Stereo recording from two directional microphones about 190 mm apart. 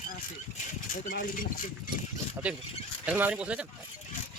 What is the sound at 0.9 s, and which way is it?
Speech, 45° left (ahead or behind).